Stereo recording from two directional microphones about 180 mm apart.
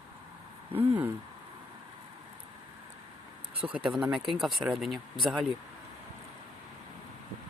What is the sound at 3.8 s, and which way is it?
Speech, 5° right (ahead or behind).